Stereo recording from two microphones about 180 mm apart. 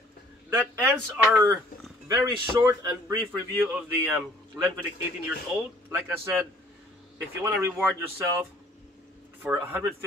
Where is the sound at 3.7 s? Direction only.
10° right (ahead or behind).